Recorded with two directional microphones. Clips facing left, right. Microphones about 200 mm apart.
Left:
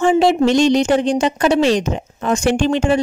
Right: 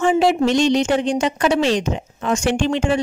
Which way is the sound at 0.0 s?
30° left (ahead or behind).